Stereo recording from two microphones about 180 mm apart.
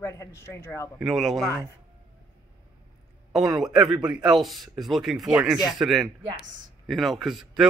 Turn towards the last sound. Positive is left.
turn(degrees=0)  # may be behind; listen again after turning